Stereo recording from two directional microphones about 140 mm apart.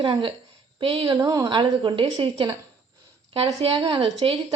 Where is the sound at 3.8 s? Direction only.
40° right (ahead or behind).